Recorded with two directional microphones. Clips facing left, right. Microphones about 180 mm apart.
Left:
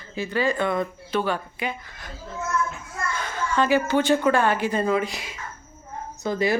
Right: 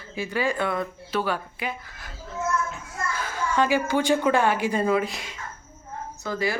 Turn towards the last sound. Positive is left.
turn(degrees=20)  # may be behind; listen again after turning